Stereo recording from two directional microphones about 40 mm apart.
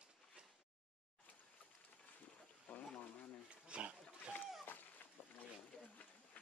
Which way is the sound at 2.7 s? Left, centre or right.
Left.